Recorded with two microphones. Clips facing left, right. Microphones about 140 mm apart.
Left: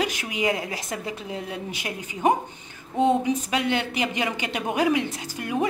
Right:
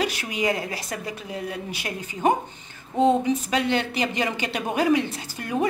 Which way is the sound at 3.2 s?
15° left (ahead or behind).